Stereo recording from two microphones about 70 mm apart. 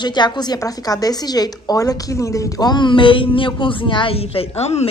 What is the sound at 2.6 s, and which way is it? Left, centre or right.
Speech, left.